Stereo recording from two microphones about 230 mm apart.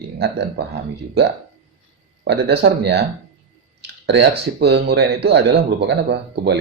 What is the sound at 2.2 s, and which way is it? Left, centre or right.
Speech, right.